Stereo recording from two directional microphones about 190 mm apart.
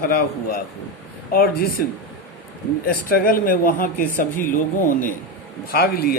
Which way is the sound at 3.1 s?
50° left (ahead or behind).